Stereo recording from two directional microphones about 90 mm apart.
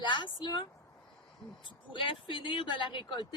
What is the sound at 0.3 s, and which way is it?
Speech, 60° left (ahead or behind).